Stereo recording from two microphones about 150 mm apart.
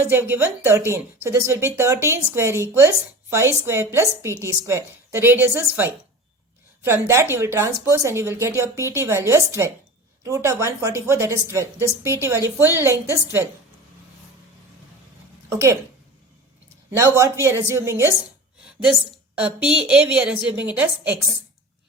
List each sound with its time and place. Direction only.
0.0 s a woman's voice: 15° right (ahead or behind)
15.4 s speech: 20° right (ahead or behind)
17.0 s a woman's voice: 20° right (ahead or behind)
19.1 s a woman's voice: 5° right (ahead or behind)